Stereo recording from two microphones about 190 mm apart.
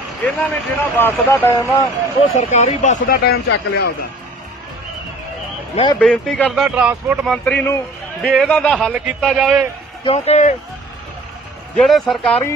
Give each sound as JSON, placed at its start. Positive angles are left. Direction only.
{"t": 0.2, "sound": "speech", "side_deg": 5}
{"t": 2.3, "sound": "speech", "side_deg": 40}
{"t": 3.3, "sound": "speech", "side_deg": 65}
{"t": 5.9, "sound": "a man's voice", "side_deg": 5}
{"t": 7.4, "sound": "a man's voice", "side_deg": 10}
{"t": 10.0, "sound": "speech", "side_deg": 30}
{"t": 11.7, "sound": "a man's voice", "side_deg": 0}